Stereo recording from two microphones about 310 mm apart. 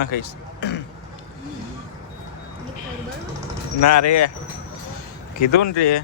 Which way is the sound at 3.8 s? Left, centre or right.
Left.